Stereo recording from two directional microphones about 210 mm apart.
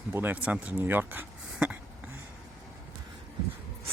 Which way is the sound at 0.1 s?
10° right (ahead or behind).